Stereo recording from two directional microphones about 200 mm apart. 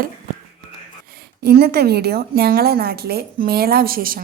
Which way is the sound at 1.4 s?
50° right (ahead or behind).